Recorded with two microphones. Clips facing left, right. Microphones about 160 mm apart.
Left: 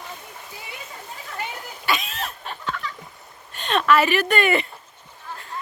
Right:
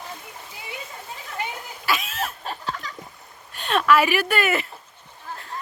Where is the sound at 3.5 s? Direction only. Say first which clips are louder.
Even; 5° right (ahead or behind).